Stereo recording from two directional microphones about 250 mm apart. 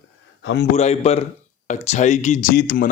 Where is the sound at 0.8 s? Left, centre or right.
Left.